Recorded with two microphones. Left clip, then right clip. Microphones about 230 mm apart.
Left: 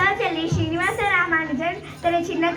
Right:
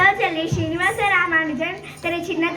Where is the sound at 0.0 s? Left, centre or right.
Right.